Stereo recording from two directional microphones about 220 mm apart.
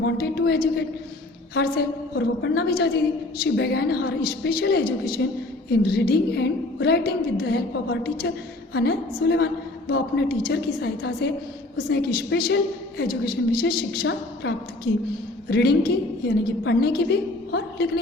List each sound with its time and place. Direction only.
0.0 s a woman's voice: 50° left (ahead or behind)